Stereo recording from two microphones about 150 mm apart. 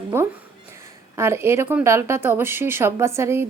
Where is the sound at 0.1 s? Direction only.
15° right (ahead or behind).